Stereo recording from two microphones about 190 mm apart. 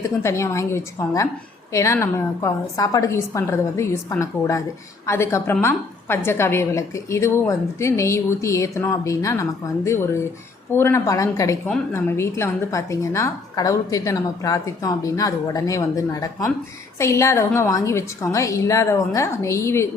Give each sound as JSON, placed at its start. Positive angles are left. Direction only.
{"t": 0.0, "sound": "a woman's voice", "side_deg": 15}